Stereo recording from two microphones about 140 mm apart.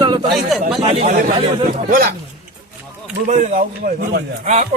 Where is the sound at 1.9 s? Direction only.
90° right.